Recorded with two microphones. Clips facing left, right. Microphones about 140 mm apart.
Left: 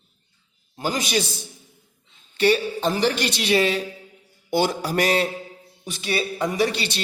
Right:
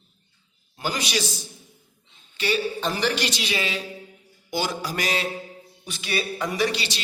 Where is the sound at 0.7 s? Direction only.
45° left (ahead or behind).